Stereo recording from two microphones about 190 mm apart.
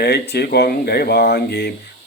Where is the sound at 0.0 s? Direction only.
60° left (ahead or behind).